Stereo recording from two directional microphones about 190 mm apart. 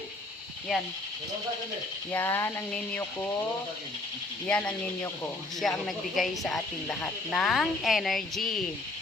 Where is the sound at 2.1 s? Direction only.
10° left (ahead or behind).